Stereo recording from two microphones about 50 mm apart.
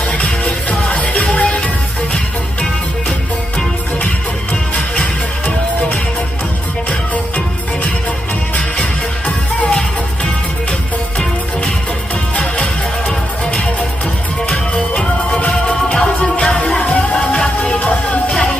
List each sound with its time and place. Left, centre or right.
0.0 s music: left
8.5 s music: left
13.5 s music: left